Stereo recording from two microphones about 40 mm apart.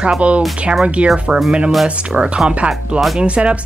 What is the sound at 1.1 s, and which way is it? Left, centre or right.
Speech, right.